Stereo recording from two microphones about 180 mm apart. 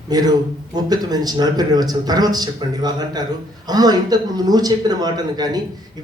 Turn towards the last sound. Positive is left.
turn(degrees=-20)  # may be behind; listen again after turning